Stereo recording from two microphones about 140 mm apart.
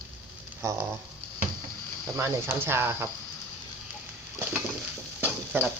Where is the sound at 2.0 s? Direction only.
20° right (ahead or behind).